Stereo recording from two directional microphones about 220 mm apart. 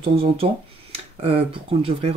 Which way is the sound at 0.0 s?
25° right (ahead or behind).